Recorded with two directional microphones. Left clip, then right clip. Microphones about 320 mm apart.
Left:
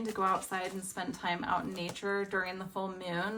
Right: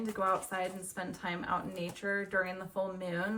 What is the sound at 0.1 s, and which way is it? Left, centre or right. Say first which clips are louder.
Speech: left 1 dB; centre.